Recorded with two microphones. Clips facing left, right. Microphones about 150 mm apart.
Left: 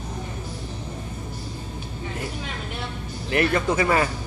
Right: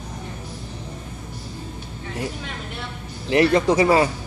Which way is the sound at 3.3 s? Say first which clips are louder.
Right 5 dB; 30° right (ahead or behind).